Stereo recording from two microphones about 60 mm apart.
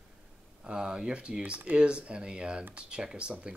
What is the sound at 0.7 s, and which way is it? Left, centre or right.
Speech, centre.